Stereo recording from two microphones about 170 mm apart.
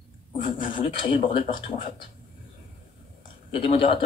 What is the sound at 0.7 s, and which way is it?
Speech, 30° left (ahead or behind).